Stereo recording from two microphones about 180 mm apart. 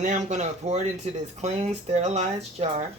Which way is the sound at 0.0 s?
40° right (ahead or behind).